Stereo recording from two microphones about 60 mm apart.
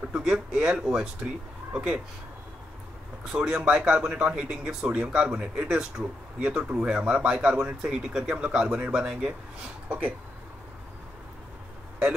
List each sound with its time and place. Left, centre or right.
0.1 s speech: centre
3.3 s speech: centre
6.6 s speech: centre
9.8 s speech: right